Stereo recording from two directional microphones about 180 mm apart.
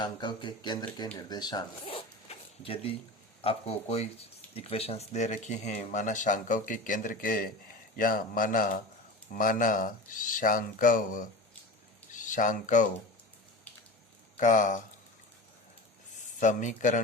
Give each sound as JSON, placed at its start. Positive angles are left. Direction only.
{"t": 0.0, "sound": "speech", "side_deg": 25}
{"t": 14.3, "sound": "speech", "side_deg": 45}
{"t": 16.1, "sound": "speech", "side_deg": 45}